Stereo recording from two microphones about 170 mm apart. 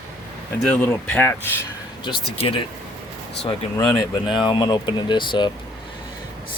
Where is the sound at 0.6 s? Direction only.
5° left (ahead or behind).